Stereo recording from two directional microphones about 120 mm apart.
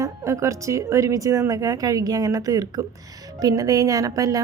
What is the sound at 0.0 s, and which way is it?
A woman's voice, 25° right (ahead or behind).